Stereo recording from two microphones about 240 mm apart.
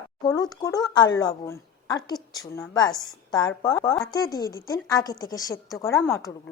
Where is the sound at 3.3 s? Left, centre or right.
Centre.